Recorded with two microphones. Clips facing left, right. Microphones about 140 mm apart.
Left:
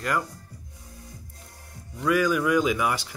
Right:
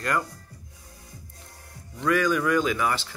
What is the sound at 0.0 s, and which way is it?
Speech, 5° left (ahead or behind).